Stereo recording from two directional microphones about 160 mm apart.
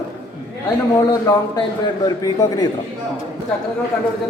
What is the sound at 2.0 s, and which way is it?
Speech, 25° left (ahead or behind).